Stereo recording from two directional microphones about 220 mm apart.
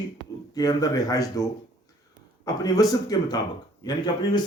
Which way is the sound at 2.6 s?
15° left (ahead or behind).